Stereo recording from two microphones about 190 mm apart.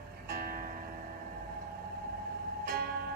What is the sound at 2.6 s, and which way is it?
Music, 55° right (ahead or behind).